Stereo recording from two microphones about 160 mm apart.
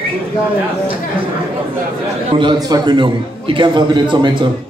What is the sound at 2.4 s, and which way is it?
A man's voice, 30° right (ahead or behind).